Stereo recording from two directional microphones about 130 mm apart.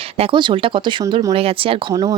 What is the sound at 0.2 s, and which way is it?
A woman's voice, 40° right (ahead or behind).